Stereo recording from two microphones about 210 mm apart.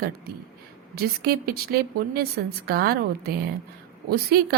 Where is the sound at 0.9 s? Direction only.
50° right (ahead or behind).